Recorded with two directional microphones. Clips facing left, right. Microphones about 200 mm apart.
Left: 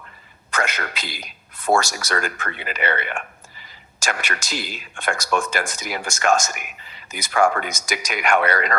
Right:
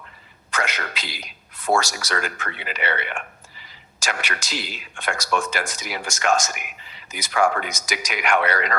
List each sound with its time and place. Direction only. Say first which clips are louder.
0.5 s a man's voice: left 2 dB; 50° left (ahead or behind)